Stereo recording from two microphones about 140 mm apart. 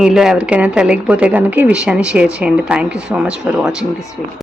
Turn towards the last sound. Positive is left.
turn(degrees=-5)  # may be behind; listen again after turning